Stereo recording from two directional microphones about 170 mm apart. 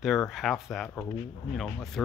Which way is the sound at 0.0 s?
Centre (ahead or behind).